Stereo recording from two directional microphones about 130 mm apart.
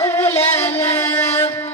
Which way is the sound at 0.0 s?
20° left (ahead or behind).